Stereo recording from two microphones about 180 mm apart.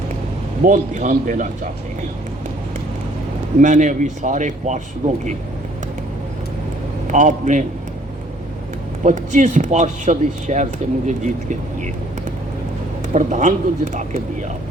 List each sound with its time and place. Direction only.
0.6 s speech: 45° right (ahead or behind)
3.6 s speech: 45° right (ahead or behind)
7.1 s speech: 45° right (ahead or behind)
9.0 s speech: 45° right (ahead or behind)
13.1 s speech: 45° right (ahead or behind)